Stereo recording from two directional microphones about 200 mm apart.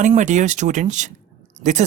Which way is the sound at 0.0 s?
35° right (ahead or behind).